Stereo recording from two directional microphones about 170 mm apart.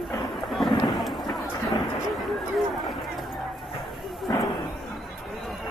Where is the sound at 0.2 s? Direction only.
Centre (ahead or behind).